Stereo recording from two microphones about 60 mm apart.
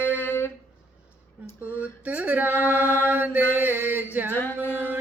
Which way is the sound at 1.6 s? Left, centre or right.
Right.